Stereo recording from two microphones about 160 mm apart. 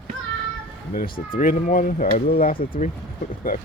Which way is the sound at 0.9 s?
65° left (ahead or behind).